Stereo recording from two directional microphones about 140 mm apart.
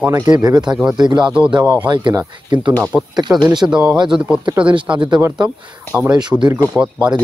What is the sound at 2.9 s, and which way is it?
Speech, 10° right (ahead or behind).